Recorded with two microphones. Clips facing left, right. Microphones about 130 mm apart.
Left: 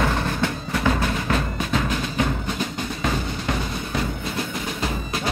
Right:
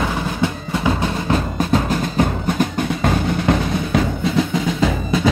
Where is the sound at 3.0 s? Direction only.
60° right (ahead or behind).